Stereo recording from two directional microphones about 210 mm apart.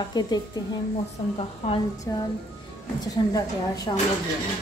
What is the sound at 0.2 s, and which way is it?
Speech, 20° left (ahead or behind).